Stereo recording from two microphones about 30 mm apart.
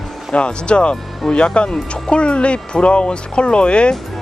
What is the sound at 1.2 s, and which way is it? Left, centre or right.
Speech, centre.